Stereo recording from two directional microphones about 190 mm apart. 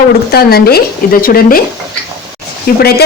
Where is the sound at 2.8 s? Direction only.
55° left (ahead or behind).